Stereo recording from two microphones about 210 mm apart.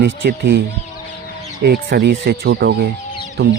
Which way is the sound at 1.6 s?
50° right (ahead or behind).